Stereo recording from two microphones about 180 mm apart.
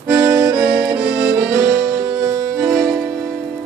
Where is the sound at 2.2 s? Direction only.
25° right (ahead or behind).